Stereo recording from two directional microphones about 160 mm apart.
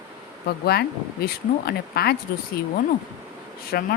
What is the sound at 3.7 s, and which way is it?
Speech, 75° left (ahead or behind).